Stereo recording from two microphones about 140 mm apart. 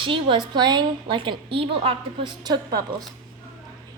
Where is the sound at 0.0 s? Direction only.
35° right (ahead or behind).